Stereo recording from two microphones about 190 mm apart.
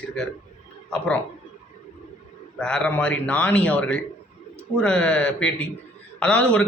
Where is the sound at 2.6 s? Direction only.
5° left (ahead or behind).